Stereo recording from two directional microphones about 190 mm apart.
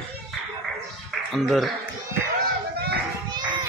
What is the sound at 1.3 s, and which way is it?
Speech, centre (ahead or behind).